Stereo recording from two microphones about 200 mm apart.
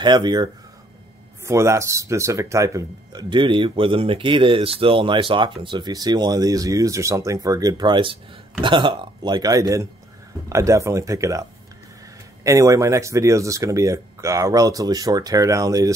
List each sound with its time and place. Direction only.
0.0 s speech: 20° right (ahead or behind)
12.4 s speech: 15° right (ahead or behind)